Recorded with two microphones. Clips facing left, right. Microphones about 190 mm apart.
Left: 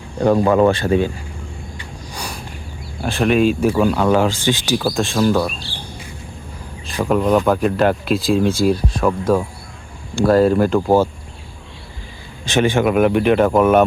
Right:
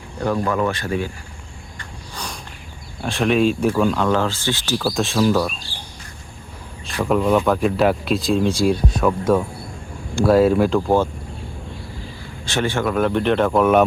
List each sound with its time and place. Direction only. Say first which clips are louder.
0.2 s speech: left 7 dB; 30° left (ahead or behind)
2.1 s a sound: left 2 dB; 10° left (ahead or behind)
3.0 s speech: left 2 dB; centre (ahead or behind)
4.9 s speech: even; centre (ahead or behind)
7.0 s speech: left 2 dB; centre (ahead or behind)
12.5 s speech: left 5 dB; 20° left (ahead or behind)